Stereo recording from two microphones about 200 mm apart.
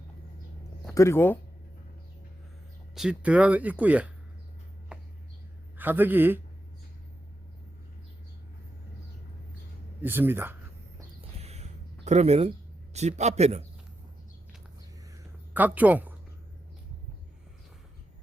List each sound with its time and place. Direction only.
0.9 s speech: 15° left (ahead or behind)
2.9 s speech: 5° right (ahead or behind)
4.9 s a sound: 5° right (ahead or behind)
5.7 s a man's voice: 10° right (ahead or behind)
10.0 s speech: 10° right (ahead or behind)
11.3 s a sound: 30° right (ahead or behind)
15.5 s speech: 10° right (ahead or behind)